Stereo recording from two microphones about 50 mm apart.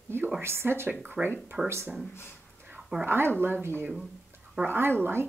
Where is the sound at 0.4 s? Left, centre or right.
Right.